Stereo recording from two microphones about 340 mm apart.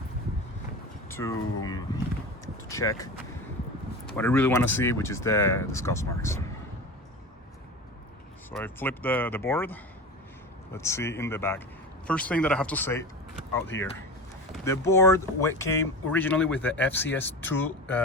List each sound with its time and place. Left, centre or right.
1.0 s speech: centre
8.4 s speech: centre
13.7 s speech: left
14.5 s speech: centre